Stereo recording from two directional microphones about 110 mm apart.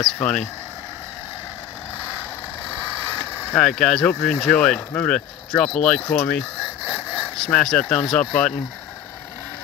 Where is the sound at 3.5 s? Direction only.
5° left (ahead or behind).